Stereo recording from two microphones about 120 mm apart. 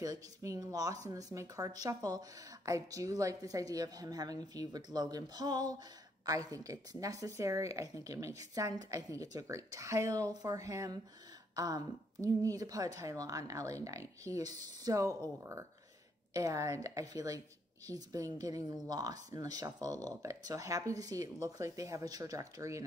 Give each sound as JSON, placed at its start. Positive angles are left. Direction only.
{"t": 0.0, "sound": "a woman's voice", "side_deg": -30}